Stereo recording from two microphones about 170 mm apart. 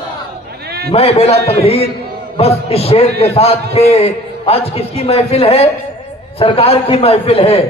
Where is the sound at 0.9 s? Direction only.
35° left (ahead or behind).